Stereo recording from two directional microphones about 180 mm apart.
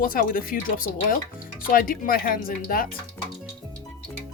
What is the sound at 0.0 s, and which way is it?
Speech, 50° left (ahead or behind).